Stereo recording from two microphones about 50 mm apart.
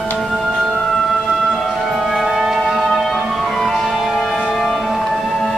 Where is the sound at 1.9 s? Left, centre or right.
Centre.